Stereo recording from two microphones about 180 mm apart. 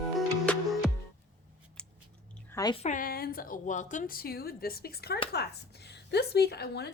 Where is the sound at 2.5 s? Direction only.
20° left (ahead or behind).